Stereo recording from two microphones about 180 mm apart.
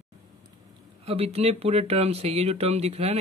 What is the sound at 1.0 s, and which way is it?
Speech, 35° right (ahead or behind).